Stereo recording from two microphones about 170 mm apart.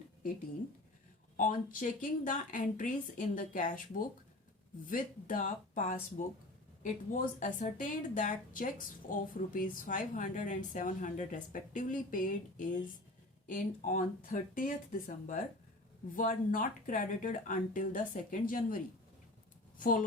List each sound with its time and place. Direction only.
1.4 s speech: 50° left (ahead or behind)
19.8 s speech: 55° left (ahead or behind)